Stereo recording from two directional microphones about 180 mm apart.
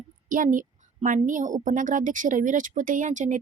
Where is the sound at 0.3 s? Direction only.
50° right (ahead or behind).